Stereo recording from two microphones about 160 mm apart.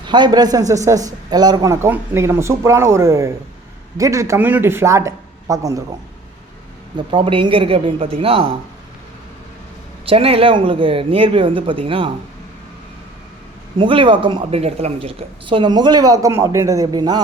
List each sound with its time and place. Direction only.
0.1 s speech: 25° right (ahead or behind)
6.9 s speech: 30° right (ahead or behind)
10.1 s speech: 35° right (ahead or behind)
13.7 s speech: 30° right (ahead or behind)